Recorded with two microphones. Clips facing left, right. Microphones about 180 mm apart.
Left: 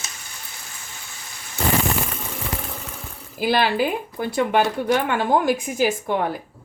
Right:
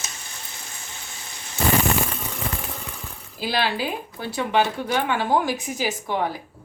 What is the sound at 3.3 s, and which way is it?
Speech, 50° left (ahead or behind).